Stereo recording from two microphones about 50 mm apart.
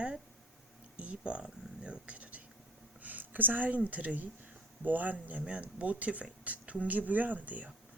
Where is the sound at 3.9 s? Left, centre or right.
Right.